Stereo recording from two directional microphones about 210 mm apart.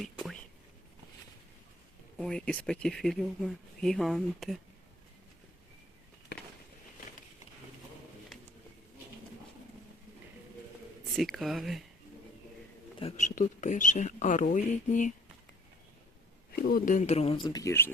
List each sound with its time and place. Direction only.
0.0 s whispering: centre (ahead or behind)
2.1 s speech: 5° left (ahead or behind)
11.2 s speech: centre (ahead or behind)
13.0 s speech: 30° left (ahead or behind)
16.5 s speech: 45° left (ahead or behind); by 17.9 s 10° left (ahead or behind)